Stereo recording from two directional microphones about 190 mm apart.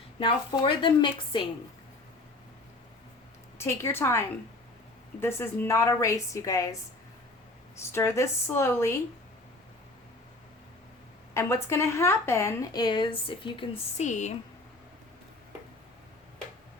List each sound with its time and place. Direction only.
0.2 s a woman's voice: 25° left (ahead or behind)
3.6 s a woman's voice: 15° left (ahead or behind)
7.8 s a woman's voice: 15° left (ahead or behind)
11.3 s a woman's voice: 15° left (ahead or behind)
14.0 s speech: 40° left (ahead or behind)